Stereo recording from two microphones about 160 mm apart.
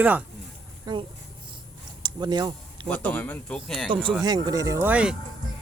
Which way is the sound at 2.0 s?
25° right (ahead or behind).